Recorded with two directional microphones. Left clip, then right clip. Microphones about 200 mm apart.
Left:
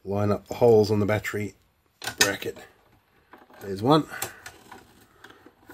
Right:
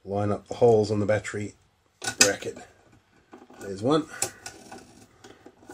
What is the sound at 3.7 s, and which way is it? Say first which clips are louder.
Speech: left 3 dB; 50° left (ahead or behind).